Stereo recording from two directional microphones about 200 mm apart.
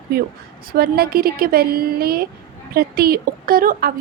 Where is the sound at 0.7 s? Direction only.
50° right (ahead or behind).